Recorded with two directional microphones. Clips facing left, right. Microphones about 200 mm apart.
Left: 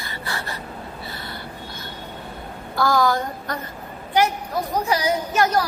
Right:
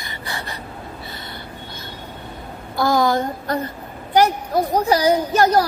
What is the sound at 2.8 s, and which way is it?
A woman's voice, 20° right (ahead or behind).